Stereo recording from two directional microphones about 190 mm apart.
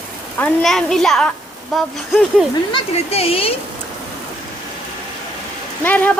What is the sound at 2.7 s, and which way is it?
Speech, 30° left (ahead or behind).